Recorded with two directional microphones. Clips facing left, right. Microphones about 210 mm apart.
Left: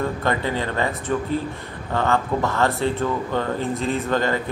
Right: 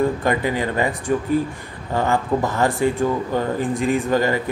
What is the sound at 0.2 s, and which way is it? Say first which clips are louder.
Speech: right 3 dB; 10° right (ahead or behind).